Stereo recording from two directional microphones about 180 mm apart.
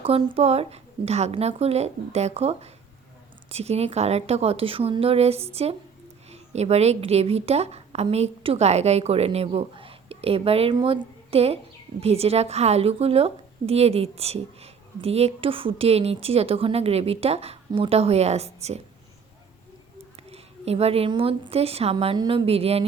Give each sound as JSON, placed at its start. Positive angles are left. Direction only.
{"t": 0.0, "sound": "a woman's voice", "side_deg": -30}
{"t": 20.3, "sound": "a woman's voice", "side_deg": -35}